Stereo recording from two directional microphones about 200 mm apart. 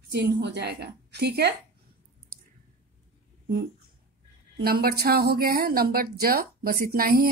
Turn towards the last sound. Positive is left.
turn(degrees=-45)  # may be behind; listen again after turning